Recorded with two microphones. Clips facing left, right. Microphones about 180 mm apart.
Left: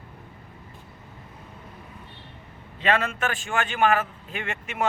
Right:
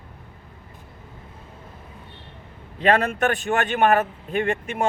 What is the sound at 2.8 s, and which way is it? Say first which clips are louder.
Speech: right 5 dB; 40° right (ahead or behind).